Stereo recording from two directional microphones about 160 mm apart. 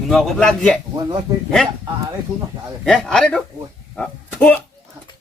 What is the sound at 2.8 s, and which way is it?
Speech, 5° left (ahead or behind).